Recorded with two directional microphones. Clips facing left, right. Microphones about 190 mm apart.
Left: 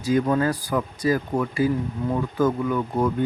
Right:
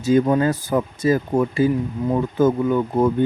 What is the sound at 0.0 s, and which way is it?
Speech, 25° right (ahead or behind).